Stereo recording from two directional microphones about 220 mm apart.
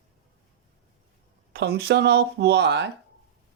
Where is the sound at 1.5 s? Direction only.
50° right (ahead or behind).